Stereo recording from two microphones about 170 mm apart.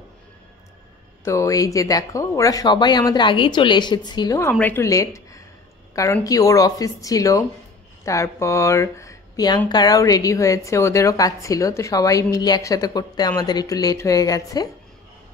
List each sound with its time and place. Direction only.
1.2 s speech: 20° left (ahead or behind)